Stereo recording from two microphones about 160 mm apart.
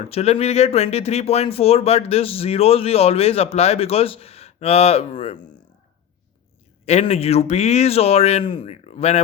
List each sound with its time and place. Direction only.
0.1 s speech: 40° left (ahead or behind)
6.8 s a man's voice: 40° left (ahead or behind)